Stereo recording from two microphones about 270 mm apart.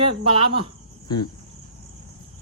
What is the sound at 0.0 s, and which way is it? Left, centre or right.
Speech, centre.